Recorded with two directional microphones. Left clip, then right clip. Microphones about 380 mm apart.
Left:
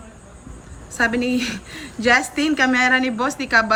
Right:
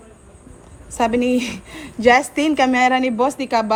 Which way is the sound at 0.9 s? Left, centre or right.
Centre.